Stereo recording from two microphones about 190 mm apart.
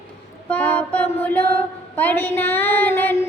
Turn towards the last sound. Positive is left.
turn(degrees=10)  # may be behind; listen again after turning